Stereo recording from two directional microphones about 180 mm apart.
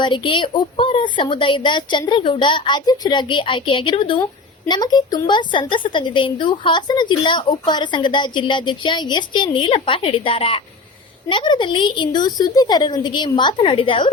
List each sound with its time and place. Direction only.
0.0 s a woman's voice: 25° left (ahead or behind)